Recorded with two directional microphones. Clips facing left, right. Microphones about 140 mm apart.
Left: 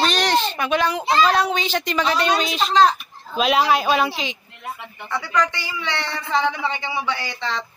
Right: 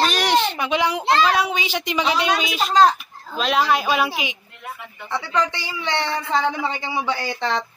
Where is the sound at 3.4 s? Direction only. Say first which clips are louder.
Left 2 dB; centre (ahead or behind).